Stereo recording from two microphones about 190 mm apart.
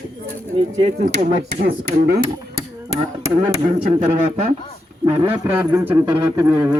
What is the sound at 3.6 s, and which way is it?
Speech, 35° right (ahead or behind).